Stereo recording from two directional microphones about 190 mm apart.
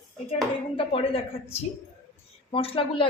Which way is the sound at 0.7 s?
30° left (ahead or behind).